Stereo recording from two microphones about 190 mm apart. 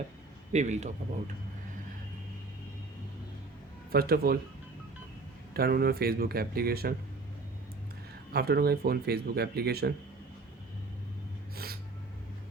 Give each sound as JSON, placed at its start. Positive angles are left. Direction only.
{"t": 0.5, "sound": "a man's voice", "side_deg": -40}
{"t": 3.9, "sound": "speech", "side_deg": -55}
{"t": 5.5, "sound": "speech", "side_deg": -55}
{"t": 8.3, "sound": "speech", "side_deg": -55}
{"t": 11.5, "sound": "a sound", "side_deg": -55}